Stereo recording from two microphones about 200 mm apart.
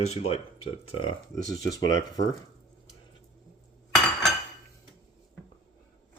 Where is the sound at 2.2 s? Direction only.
40° left (ahead or behind).